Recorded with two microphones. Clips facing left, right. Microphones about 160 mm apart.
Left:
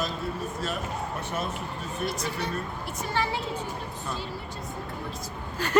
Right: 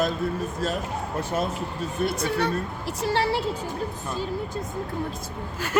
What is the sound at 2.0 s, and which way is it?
Speech, 60° right (ahead or behind).